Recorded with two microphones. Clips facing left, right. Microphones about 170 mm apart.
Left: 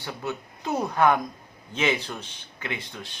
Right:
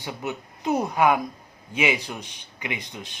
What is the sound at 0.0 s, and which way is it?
Speech, 15° right (ahead or behind).